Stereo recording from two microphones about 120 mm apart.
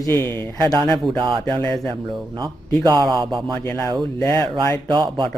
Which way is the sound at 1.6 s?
5° left (ahead or behind).